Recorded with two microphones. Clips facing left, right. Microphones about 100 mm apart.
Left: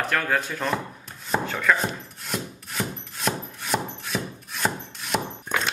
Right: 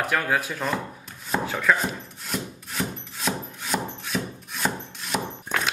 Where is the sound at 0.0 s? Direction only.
5° right (ahead or behind).